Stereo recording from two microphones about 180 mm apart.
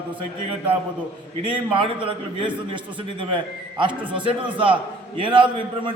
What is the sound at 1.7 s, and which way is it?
A man's voice, 30° right (ahead or behind).